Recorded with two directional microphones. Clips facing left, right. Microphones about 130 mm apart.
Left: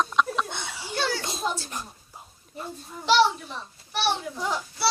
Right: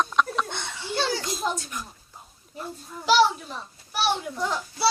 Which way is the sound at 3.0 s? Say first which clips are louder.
Right 1 dB; 5° right (ahead or behind).